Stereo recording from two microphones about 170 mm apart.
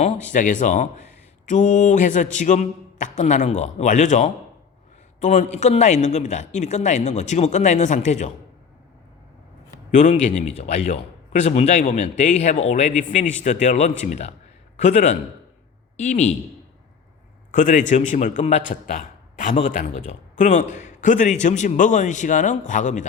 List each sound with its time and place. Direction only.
0.0 s a man's voice: 45° left (ahead or behind)
9.9 s a man's voice: 45° left (ahead or behind)
17.5 s a man's voice: 50° left (ahead or behind)